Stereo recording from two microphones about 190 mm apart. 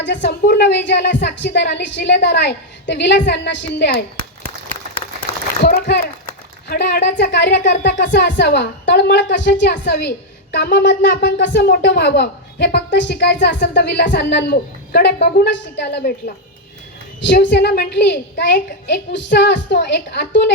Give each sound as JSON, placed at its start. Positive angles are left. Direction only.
{"t": 0.0, "sound": "a woman's voice", "side_deg": 65}
{"t": 5.6, "sound": "a sound", "side_deg": 60}
{"t": 6.7, "sound": "a woman's voice", "side_deg": 60}
{"t": 7.6, "sound": "a sound", "side_deg": 40}
{"t": 7.9, "sound": "a woman's voice", "side_deg": 65}
{"t": 17.2, "sound": "a woman's voice", "side_deg": 65}